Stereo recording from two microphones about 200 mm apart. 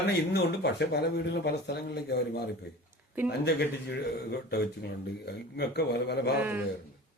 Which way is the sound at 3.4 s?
55° left (ahead or behind).